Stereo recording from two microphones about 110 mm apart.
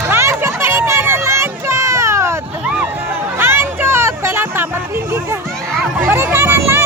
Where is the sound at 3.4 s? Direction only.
25° right (ahead or behind).